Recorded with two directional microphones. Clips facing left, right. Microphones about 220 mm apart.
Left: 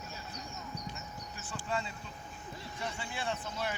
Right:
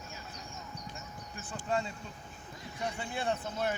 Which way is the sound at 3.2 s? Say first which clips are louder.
Right 4 dB; 50° right (ahead or behind).